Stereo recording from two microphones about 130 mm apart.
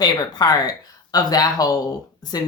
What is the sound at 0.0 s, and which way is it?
Speech, 30° left (ahead or behind).